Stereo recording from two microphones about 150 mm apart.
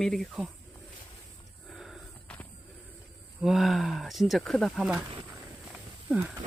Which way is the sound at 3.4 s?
Centre (ahead or behind).